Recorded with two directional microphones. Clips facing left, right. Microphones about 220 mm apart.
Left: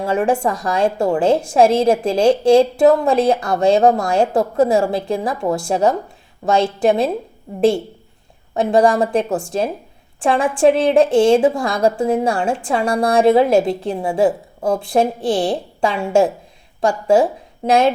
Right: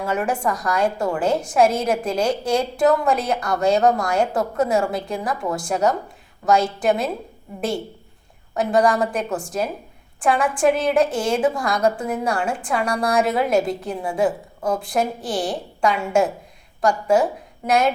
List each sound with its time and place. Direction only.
0.0 s a woman's voice: 30° left (ahead or behind)
8.5 s a woman's voice: 30° left (ahead or behind)